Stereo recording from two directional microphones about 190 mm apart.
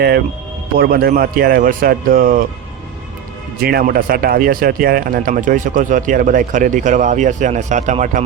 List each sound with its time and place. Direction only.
0.8 s speech: 55° right (ahead or behind)
3.6 s speech: 55° right (ahead or behind)